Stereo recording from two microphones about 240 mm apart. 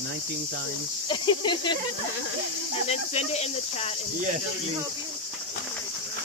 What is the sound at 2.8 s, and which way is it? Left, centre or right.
Speech, left.